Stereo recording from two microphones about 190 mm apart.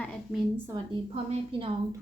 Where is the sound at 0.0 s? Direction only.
5° left (ahead or behind).